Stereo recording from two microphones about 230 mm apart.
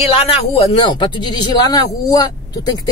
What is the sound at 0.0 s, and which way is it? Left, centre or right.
Speech, left.